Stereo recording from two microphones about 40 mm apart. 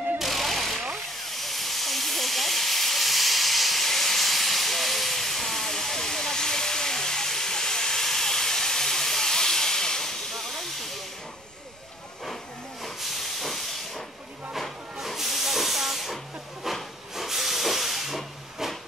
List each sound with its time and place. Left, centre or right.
0.2 s vehicle: centre
1.2 s hiss: centre
12.8 s hiss: centre
16.6 s wood: centre
17.1 s hiss: centre